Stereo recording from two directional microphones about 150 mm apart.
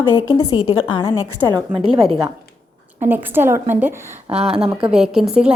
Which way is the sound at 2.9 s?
15° right (ahead or behind).